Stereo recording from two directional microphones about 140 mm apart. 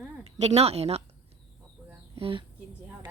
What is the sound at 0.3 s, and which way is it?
Speech, 50° right (ahead or behind).